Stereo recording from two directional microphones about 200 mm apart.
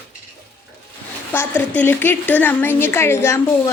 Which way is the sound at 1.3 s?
10° left (ahead or behind).